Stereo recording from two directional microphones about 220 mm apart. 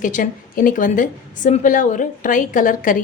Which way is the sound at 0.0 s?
40° left (ahead or behind).